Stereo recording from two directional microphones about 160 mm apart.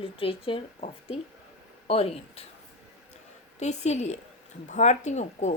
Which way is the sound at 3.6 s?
45° left (ahead or behind).